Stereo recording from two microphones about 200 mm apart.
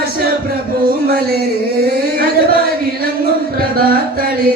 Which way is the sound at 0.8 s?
45° right (ahead or behind).